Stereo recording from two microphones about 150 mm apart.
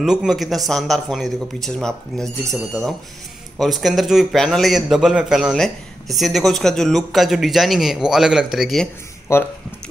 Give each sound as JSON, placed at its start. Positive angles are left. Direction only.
{"t": 0.0, "sound": "a man's voice", "side_deg": -5}
{"t": 9.3, "sound": "speech", "side_deg": 15}